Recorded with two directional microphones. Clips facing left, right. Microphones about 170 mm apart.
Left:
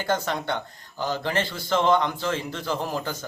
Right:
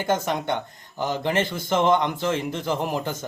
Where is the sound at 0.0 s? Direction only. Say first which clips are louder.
Right 2 dB; 20° right (ahead or behind).